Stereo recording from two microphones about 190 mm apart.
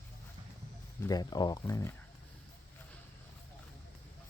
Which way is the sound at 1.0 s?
20° left (ahead or behind).